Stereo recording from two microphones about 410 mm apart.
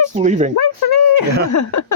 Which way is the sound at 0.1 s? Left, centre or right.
Centre.